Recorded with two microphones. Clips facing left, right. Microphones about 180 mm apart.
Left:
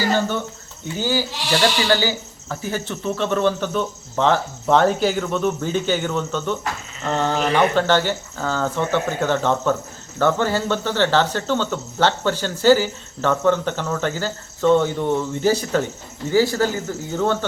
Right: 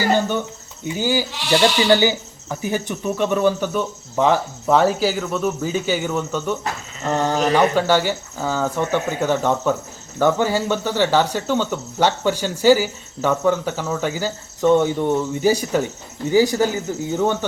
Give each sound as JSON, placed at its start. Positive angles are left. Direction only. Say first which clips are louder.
{"t": 0.9, "sound": "speech", "louder": "right 2 dB", "side_deg": -15}